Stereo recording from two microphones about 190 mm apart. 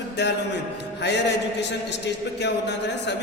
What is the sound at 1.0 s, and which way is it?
A man's voice, 65° left (ahead or behind).